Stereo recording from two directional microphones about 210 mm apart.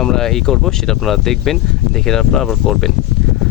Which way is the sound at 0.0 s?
Centre (ahead or behind).